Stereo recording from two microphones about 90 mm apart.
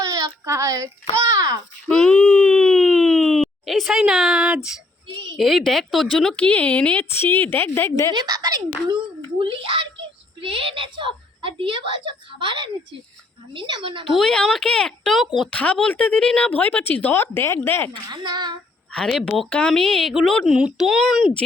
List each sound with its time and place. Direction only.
0.0 s a sound: 40° right (ahead or behind)
1.9 s a sound: 5° left (ahead or behind)
5.4 s speech: centre (ahead or behind)
7.0 s a woman's voice: 25° left (ahead or behind)
8.1 s speech: 45° right (ahead or behind)
9.4 s a woman's voice: 70° right (ahead or behind)
10.4 s a woman's voice: 85° right; by 14.1 s 70° right (ahead or behind)
14.1 s speech: 5° left (ahead or behind)
15.4 s speech: 15° left (ahead or behind)
17.9 s speech: 55° right (ahead or behind)
18.9 s speech: 5° left (ahead or behind)
19.5 s speech: 10° left (ahead or behind)
20.5 s a child's voice: 10° right (ahead or behind)